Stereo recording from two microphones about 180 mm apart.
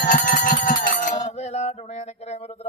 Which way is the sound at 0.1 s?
45° left (ahead or behind).